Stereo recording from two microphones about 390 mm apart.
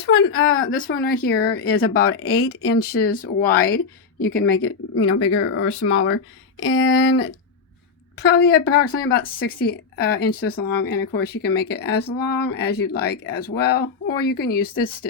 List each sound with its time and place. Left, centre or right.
0.0 s speech: left
1.9 s speech: left
2.6 s speech: left